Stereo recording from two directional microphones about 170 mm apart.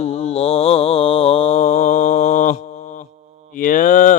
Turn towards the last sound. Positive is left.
turn(degrees=50)  # may be behind; listen again after turning